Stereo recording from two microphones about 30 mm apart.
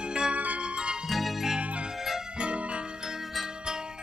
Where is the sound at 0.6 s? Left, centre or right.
Right.